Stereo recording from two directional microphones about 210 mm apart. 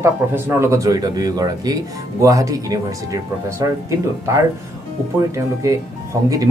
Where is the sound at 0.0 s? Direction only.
10° right (ahead or behind).